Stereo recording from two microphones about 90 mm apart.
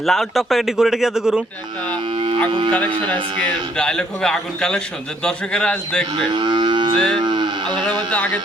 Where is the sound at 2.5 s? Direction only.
70° right (ahead or behind).